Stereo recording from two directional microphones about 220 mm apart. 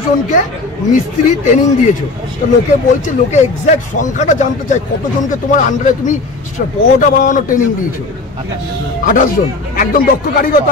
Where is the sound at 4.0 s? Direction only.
35° left (ahead or behind).